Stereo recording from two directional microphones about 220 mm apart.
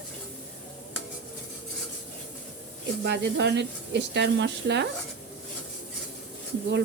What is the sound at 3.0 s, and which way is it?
Speech, 50° right (ahead or behind).